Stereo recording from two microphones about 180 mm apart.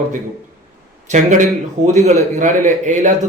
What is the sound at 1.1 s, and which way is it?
A man's voice, 45° right (ahead or behind).